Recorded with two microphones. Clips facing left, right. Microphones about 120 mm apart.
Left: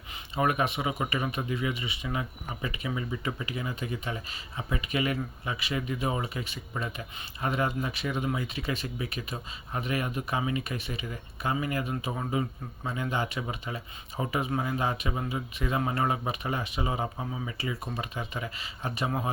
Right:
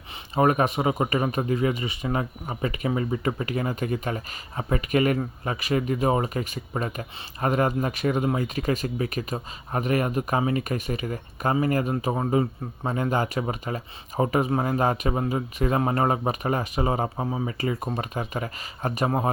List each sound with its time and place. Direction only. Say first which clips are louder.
0.3 s a man's voice: right 6 dB; 40° right (ahead or behind)